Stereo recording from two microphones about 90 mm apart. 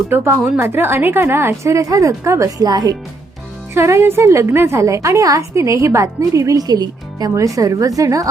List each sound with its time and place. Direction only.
0.1 s a woman's voice: 20° right (ahead or behind); by 2.9 s 45° right (ahead or behind)
3.8 s a woman's voice: 30° right (ahead or behind); by 7.3 s 45° right (ahead or behind)
7.3 s a woman's voice: 35° right (ahead or behind)